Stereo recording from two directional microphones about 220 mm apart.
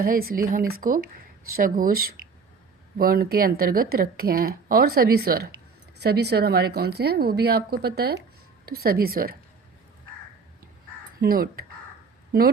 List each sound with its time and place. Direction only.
0.0 s speech: 40° right (ahead or behind)
11.2 s speech: 40° right (ahead or behind)